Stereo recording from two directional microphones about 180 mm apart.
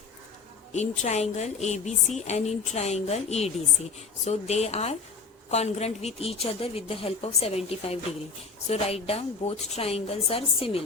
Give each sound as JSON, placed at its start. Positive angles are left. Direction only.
{"t": 0.7, "sound": "a woman's voice", "side_deg": 40}